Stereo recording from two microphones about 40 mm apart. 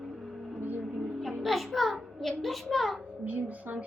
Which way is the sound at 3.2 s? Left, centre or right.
Right.